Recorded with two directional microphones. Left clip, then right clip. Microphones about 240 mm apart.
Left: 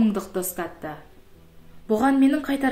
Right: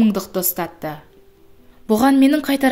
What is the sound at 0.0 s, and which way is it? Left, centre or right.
A woman's voice, right.